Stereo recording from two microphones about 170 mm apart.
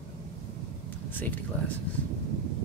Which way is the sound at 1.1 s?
10° left (ahead or behind).